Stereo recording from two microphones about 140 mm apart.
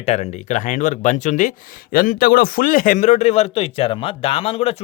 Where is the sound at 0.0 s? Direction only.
50° left (ahead or behind).